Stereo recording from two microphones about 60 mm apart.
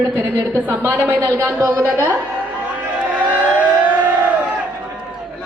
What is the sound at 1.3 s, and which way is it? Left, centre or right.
Speech, right.